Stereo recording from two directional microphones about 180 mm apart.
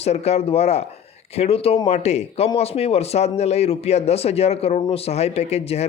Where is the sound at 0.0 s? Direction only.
35° left (ahead or behind).